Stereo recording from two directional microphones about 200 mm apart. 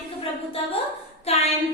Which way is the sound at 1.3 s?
30° left (ahead or behind).